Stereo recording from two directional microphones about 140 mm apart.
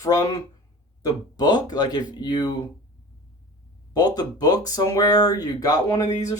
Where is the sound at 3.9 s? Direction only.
30° left (ahead or behind).